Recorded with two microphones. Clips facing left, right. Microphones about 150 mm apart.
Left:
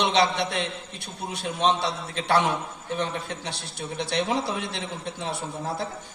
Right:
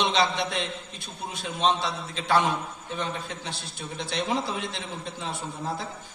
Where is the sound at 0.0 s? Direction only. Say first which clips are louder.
Left 2 dB; 65° left (ahead or behind).